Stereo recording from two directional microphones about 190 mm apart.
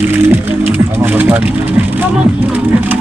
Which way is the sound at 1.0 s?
10° right (ahead or behind).